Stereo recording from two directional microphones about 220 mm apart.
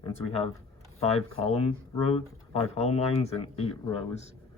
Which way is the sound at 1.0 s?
30° left (ahead or behind).